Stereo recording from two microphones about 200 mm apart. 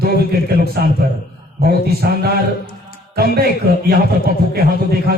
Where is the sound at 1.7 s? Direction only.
50° right (ahead or behind).